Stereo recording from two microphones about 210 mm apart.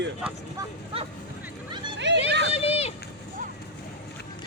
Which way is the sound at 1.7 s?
20° right (ahead or behind).